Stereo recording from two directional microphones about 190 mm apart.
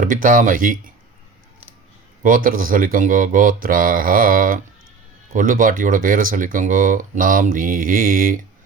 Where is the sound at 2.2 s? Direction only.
45° right (ahead or behind).